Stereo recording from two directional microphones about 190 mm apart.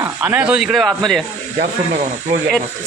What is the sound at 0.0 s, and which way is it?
Speech, 10° right (ahead or behind).